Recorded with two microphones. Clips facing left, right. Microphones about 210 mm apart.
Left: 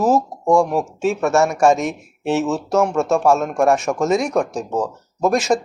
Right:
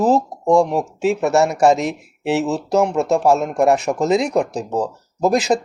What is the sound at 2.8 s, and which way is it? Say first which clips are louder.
Speech: even; 15° right (ahead or behind).